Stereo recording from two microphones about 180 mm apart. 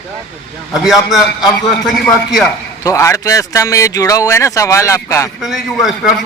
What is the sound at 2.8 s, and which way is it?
Speech, 15° left (ahead or behind).